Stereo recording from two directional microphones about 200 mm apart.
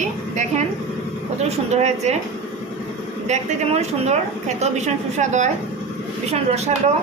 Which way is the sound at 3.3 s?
35° right (ahead or behind).